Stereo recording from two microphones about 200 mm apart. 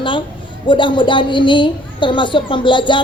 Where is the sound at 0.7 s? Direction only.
25° left (ahead or behind).